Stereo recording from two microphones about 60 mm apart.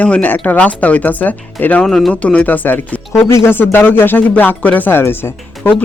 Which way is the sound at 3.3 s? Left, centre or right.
Left.